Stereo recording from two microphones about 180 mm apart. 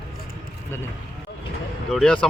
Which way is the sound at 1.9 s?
5° left (ahead or behind).